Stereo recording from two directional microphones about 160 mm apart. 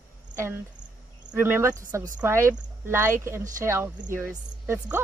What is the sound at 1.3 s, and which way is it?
Speech, 15° right (ahead or behind).